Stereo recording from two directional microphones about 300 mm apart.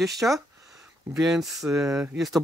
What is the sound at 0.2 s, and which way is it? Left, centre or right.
Speech, centre.